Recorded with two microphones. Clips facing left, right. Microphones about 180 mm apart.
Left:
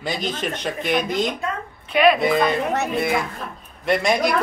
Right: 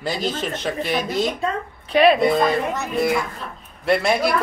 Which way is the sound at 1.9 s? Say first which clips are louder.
Right 1 dB; 30° right (ahead or behind).